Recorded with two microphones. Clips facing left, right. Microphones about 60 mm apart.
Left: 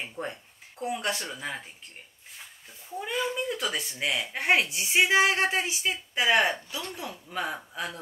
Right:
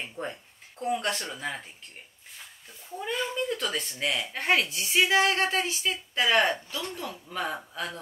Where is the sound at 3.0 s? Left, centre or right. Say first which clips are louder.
Even; centre.